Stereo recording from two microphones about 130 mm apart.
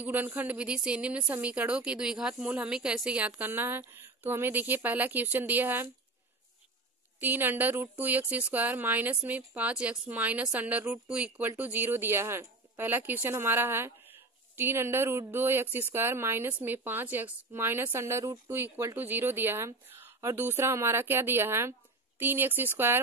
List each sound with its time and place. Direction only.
0.0 s speech: 15° right (ahead or behind)
7.2 s speech: 15° right (ahead or behind)